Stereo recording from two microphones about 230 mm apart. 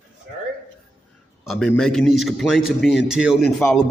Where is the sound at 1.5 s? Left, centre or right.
Centre.